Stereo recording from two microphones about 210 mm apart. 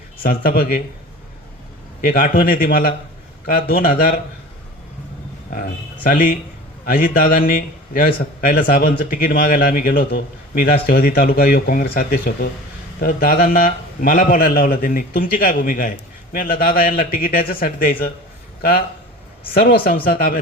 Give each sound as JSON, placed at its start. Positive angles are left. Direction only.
{"t": 0.2, "sound": "a man's voice", "side_deg": 45}
{"t": 2.0, "sound": "a man's voice", "side_deg": 40}
{"t": 5.5, "sound": "a man's voice", "side_deg": 40}